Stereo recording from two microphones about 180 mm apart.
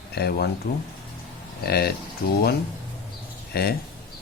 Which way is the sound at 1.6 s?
60° left (ahead or behind).